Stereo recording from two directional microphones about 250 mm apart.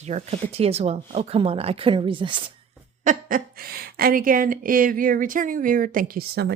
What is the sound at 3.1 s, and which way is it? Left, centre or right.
Speech, right.